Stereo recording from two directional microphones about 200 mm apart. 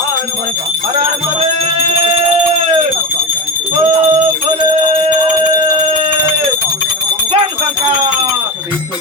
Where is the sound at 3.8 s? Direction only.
30° right (ahead or behind).